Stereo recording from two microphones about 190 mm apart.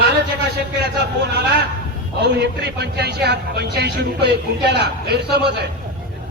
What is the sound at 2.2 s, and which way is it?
A man's voice, 60° right (ahead or behind).